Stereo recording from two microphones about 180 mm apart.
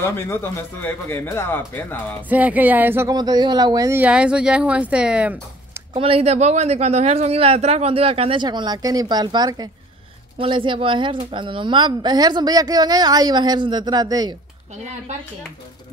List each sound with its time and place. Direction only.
0.0 s speech: 15° left (ahead or behind)
2.2 s speech: 10° right (ahead or behind)
5.9 s a woman's voice: 30° right (ahead or behind)